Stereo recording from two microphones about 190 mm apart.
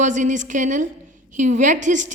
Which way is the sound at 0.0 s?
40° right (ahead or behind).